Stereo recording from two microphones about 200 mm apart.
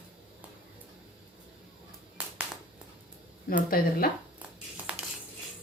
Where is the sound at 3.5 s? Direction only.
45° left (ahead or behind).